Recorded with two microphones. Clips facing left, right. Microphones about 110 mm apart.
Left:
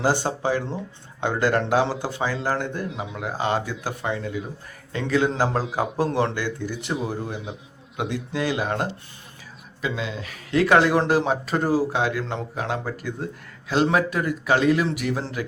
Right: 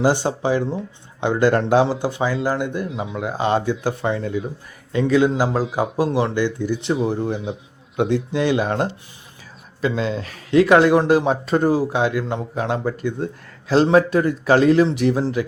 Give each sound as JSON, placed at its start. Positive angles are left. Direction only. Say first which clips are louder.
{"t": 0.0, "sound": "speech", "louder": "right 4 dB", "side_deg": -15}
{"t": 5.4, "sound": "a man's voice", "louder": "right 3 dB", "side_deg": -10}
{"t": 6.1, "sound": "speech", "louder": "right 4 dB", "side_deg": -15}
{"t": 7.3, "sound": "a man's voice", "louder": "right 6 dB", "side_deg": 0}
{"t": 8.1, "sound": "speech", "louder": "right 6 dB", "side_deg": -25}
{"t": 10.5, "sound": "speech", "louder": "right 5 dB", "side_deg": -25}
{"t": 12.5, "sound": "speech", "louder": "right 7 dB", "side_deg": -25}